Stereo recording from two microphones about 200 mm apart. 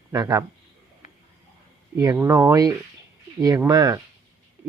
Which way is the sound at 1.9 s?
15° right (ahead or behind).